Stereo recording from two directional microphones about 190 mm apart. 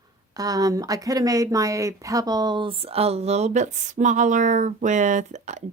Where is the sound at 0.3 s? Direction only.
20° right (ahead or behind).